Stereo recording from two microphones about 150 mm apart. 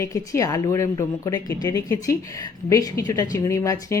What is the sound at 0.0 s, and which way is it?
A woman's voice, 20° left (ahead or behind).